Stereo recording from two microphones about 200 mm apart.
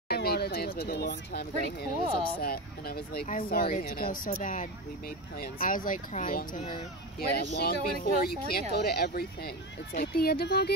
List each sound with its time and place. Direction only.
0.1 s speech: 50° left (ahead or behind); by 6.8 s 35° left (ahead or behind)
7.2 s speech: 50° left (ahead or behind)